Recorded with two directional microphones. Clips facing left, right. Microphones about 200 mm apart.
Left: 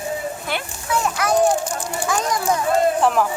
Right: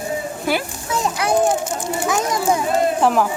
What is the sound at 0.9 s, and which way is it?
A child's voice, 20° right (ahead or behind).